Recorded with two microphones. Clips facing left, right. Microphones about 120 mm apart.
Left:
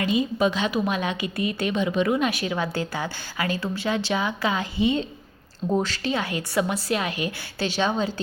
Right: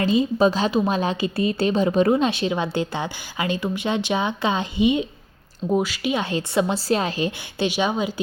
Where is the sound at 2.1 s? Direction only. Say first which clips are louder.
Right 3 dB; 25° right (ahead or behind).